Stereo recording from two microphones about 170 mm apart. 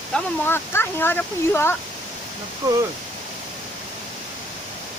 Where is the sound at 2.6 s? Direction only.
20° right (ahead or behind).